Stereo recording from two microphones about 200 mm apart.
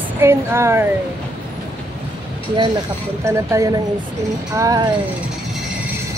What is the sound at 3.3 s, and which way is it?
Speech, 15° right (ahead or behind).